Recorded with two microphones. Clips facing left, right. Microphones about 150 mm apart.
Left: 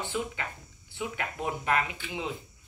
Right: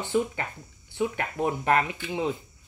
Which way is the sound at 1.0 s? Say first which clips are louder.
Right 7 dB; 40° right (ahead or behind).